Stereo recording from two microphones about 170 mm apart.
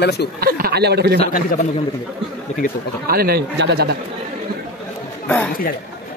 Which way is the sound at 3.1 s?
65° right (ahead or behind).